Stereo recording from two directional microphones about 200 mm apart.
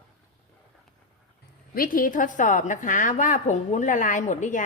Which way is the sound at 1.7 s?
45° left (ahead or behind).